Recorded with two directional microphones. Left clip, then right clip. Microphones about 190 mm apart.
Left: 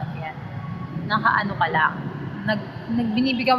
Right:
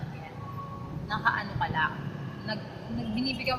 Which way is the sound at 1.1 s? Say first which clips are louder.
Left 8 dB; 20° right (ahead or behind).